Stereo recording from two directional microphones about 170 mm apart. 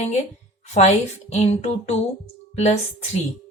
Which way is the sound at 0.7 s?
40° left (ahead or behind).